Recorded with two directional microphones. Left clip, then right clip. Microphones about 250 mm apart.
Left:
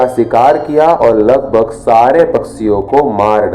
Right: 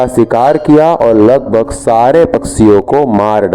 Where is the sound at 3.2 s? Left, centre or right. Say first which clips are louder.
Even; right.